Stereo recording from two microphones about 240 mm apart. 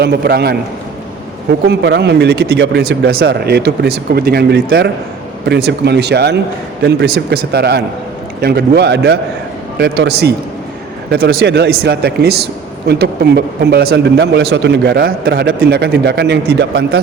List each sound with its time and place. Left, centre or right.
0.0 s speech: right